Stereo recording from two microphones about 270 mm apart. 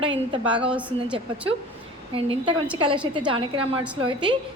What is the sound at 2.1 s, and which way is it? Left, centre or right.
A woman's voice, centre.